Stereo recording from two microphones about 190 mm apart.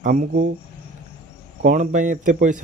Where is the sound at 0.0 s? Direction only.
40° right (ahead or behind).